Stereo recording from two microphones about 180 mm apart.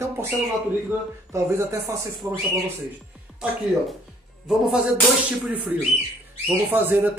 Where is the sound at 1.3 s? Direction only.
15° right (ahead or behind).